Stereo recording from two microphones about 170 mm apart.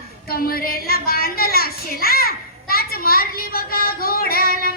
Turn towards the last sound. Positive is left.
turn(degrees=60)  # may be behind; listen again after turning